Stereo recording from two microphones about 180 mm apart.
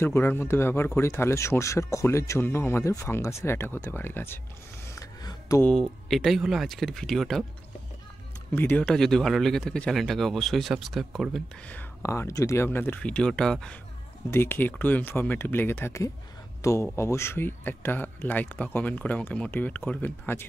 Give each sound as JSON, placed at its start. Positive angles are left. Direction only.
{"t": 0.0, "sound": "speech", "side_deg": 10}
{"t": 4.8, "sound": "a sound", "side_deg": 20}
{"t": 5.6, "sound": "speech", "side_deg": 5}
{"t": 8.5, "sound": "speech", "side_deg": 10}